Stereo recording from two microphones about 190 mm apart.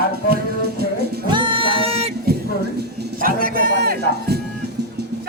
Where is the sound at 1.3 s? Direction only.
25° right (ahead or behind).